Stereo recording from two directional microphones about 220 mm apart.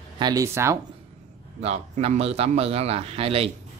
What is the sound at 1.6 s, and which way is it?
Speech, 30° right (ahead or behind).